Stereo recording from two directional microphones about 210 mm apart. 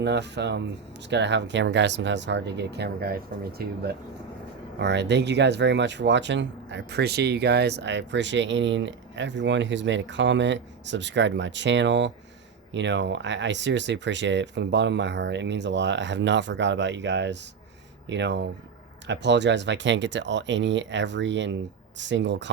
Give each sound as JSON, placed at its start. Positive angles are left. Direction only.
{"t": 0.0, "sound": "speech", "side_deg": -55}
{"t": 4.8, "sound": "speech", "side_deg": -55}